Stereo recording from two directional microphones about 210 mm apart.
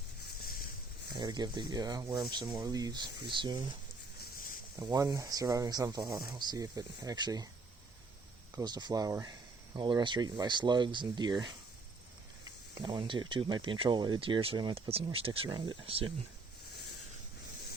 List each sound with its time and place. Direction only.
1.1 s speech: 20° right (ahead or behind)
4.2 s a sound: 40° left (ahead or behind)
4.8 s speech: 20° right (ahead or behind)
8.5 s speech: 20° right (ahead or behind)